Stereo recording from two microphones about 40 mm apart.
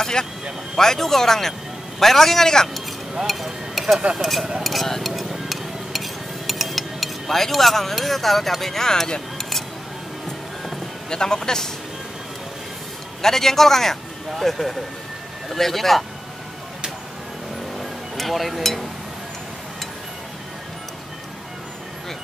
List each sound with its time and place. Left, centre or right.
0.0 s a man's voice: centre
3.3 s speech: centre
5.5 s dishes: centre
11.1 s a man's voice: centre
13.2 s a man's voice: centre
17.7 s music: centre